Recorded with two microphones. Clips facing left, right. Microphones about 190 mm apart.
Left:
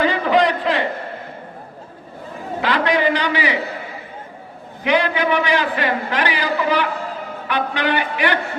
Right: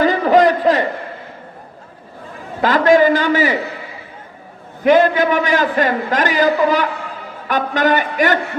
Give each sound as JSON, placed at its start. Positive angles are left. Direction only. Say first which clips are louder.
{"t": 0.0, "sound": "a sound", "louder": "right 4 dB", "side_deg": -45}
{"t": 2.6, "sound": "a man's voice", "louder": "right 7 dB", "side_deg": -45}
{"t": 4.8, "sound": "a man's voice", "louder": "right 7 dB", "side_deg": -45}